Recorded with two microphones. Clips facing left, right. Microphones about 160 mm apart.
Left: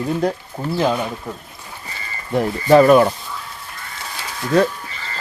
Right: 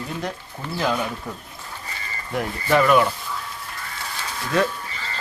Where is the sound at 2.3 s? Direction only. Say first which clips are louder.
Left 8 dB; 30° left (ahead or behind).